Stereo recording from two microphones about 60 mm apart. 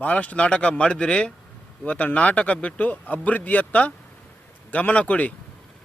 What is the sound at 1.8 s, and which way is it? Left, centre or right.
Speech, left.